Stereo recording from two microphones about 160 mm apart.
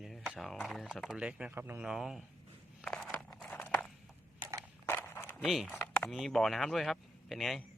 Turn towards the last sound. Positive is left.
turn(degrees=0)  # may be behind; listen again after turning